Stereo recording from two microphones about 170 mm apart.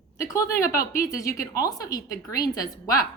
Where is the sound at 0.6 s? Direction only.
55° left (ahead or behind).